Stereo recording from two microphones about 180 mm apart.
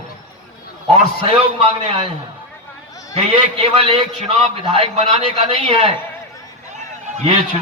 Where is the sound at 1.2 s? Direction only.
30° right (ahead or behind).